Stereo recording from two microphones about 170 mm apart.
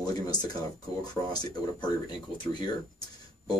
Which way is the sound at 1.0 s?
25° left (ahead or behind).